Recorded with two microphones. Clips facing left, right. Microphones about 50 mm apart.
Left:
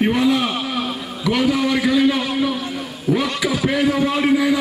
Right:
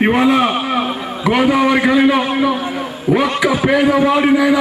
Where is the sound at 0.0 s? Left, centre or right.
Right.